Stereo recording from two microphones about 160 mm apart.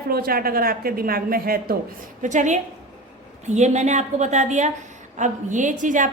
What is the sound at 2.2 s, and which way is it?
A woman's voice, 50° right (ahead or behind).